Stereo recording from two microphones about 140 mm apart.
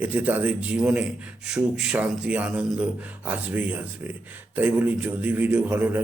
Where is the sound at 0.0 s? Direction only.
10° right (ahead or behind).